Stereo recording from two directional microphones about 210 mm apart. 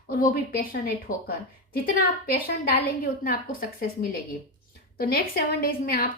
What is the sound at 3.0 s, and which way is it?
A woman's voice, 45° left (ahead or behind).